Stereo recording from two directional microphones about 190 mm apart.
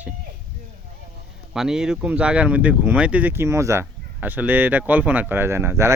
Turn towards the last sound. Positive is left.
turn(degrees=-15)  # may be behind; listen again after turning